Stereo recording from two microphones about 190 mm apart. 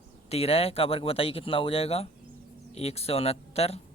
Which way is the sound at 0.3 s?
30° left (ahead or behind).